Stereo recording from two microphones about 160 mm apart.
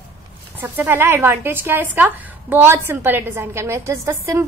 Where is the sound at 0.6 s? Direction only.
15° right (ahead or behind).